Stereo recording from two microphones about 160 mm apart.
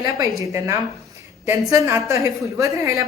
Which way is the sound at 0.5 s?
20° right (ahead or behind).